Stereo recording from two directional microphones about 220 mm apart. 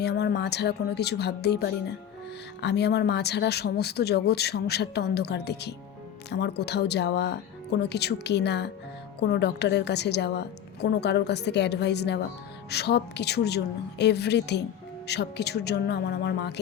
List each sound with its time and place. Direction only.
0.0 s speech: 50° left (ahead or behind)